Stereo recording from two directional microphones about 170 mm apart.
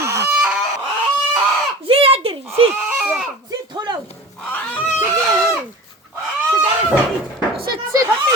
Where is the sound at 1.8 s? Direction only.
35° right (ahead or behind).